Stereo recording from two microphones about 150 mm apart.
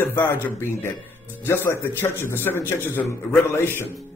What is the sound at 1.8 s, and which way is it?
A man's voice, 15° left (ahead or behind).